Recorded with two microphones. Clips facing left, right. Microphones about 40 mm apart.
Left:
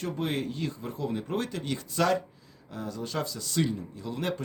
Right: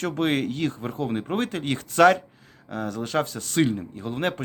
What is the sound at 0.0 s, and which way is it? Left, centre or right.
Speech, right.